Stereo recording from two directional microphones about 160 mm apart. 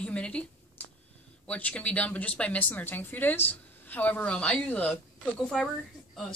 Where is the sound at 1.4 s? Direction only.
5° left (ahead or behind).